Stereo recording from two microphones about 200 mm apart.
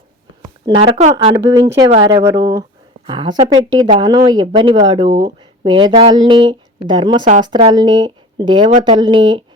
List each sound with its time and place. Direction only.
0.6 s speech: 30° right (ahead or behind)